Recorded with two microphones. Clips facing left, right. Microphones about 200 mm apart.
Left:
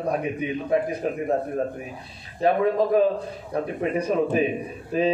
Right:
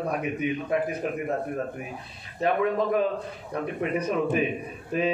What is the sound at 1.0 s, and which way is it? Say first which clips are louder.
Speech: left 3 dB; 35° left (ahead or behind).